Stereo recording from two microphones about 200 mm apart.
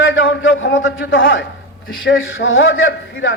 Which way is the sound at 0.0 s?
70° left (ahead or behind).